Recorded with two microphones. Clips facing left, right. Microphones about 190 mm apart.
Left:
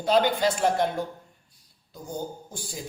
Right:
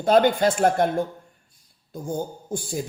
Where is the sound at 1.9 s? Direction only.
50° right (ahead or behind).